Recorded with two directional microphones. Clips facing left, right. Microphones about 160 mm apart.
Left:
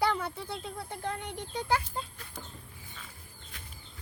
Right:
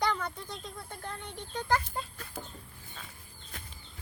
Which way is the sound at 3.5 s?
45° right (ahead or behind).